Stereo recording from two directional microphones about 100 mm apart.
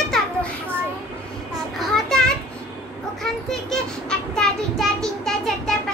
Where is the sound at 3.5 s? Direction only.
5° left (ahead or behind).